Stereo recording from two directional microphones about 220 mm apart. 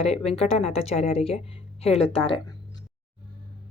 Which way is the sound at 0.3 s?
30° left (ahead or behind).